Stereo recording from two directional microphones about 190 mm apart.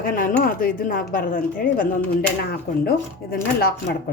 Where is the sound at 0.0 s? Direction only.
45° left (ahead or behind).